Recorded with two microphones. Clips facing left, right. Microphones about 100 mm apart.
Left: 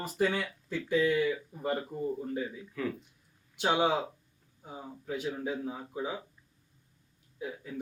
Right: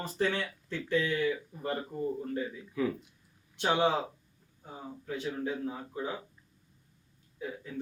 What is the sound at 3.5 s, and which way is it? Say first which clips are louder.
Speech: even; 10° left (ahead or behind).